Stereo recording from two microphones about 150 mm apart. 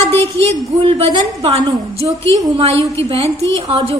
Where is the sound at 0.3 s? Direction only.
40° right (ahead or behind).